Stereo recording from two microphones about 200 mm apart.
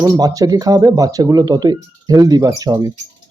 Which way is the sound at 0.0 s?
20° right (ahead or behind).